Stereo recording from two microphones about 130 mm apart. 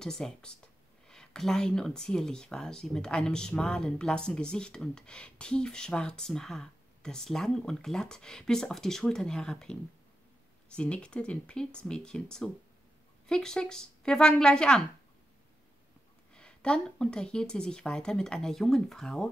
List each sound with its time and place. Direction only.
0.0 s speech: 5° left (ahead or behind)
16.3 s speech: 5° left (ahead or behind)